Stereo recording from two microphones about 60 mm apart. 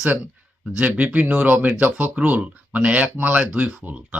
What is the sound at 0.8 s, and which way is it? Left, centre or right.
Speech, right.